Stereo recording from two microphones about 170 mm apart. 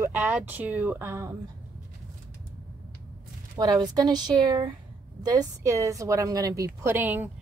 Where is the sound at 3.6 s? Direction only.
25° right (ahead or behind).